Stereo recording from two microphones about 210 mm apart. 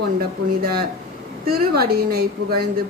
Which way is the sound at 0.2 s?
45° right (ahead or behind).